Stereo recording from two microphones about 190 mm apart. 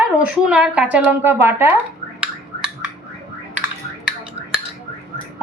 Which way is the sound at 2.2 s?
5° right (ahead or behind).